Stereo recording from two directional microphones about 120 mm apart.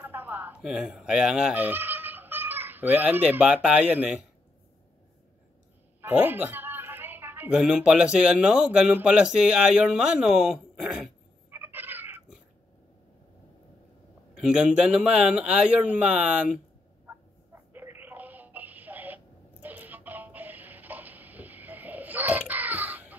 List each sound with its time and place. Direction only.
0.0 s speech: 15° right (ahead or behind)
5.9 s a sound: 15° right (ahead or behind)
7.5 s speech: 5° right (ahead or behind)
11.5 s a sound: 20° right (ahead or behind)
14.4 s speech: 5° right (ahead or behind)
17.5 s telephone: 20° right (ahead or behind)